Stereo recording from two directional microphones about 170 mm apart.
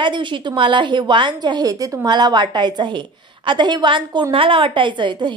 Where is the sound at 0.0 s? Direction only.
30° right (ahead or behind).